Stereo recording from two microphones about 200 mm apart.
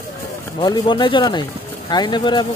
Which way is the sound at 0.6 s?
20° left (ahead or behind).